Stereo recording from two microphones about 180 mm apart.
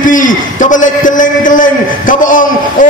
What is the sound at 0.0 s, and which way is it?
A man's voice, 45° left (ahead or behind).